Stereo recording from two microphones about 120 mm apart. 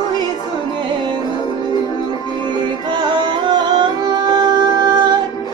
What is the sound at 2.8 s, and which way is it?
Music, 35° right (ahead or behind).